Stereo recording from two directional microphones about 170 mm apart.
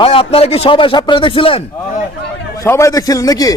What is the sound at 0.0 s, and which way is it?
A man's voice, 35° left (ahead or behind).